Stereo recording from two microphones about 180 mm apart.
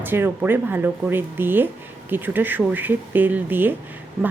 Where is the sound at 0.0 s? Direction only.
10° right (ahead or behind).